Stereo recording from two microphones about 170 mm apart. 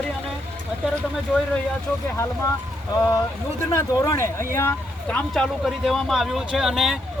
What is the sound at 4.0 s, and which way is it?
Speech, 15° left (ahead or behind).